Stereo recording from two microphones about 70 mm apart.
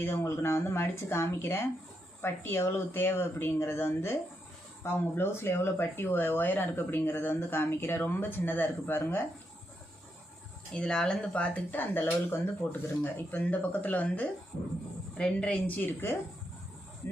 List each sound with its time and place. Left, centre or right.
0.0 s speech: left
10.7 s speech: centre; by 16.1 s left